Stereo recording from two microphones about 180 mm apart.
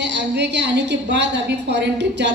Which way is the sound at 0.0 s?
75° right (ahead or behind).